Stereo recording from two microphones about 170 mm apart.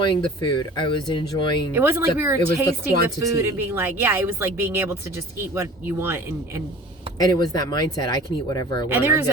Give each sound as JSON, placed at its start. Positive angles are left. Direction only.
{"t": 0.0, "sound": "speech", "side_deg": 25}
{"t": 1.7, "sound": "speech", "side_deg": -15}
{"t": 7.2, "sound": "speech", "side_deg": 25}
{"t": 8.9, "sound": "speech", "side_deg": -10}